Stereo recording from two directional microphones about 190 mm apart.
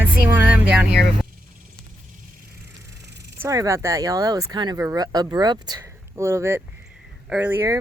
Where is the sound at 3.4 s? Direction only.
15° right (ahead or behind).